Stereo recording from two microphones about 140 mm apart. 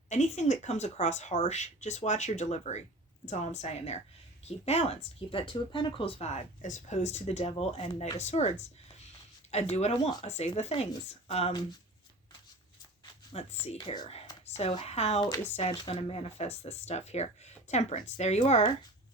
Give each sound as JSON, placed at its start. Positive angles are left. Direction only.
{"t": 0.1, "sound": "speech", "side_deg": 55}
{"t": 8.2, "sound": "speech", "side_deg": 50}
{"t": 13.3, "sound": "speech", "side_deg": 50}
{"t": 13.8, "sound": "speech", "side_deg": 30}
{"t": 14.6, "sound": "speech", "side_deg": 50}